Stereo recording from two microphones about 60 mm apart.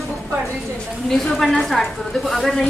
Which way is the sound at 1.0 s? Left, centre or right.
Centre.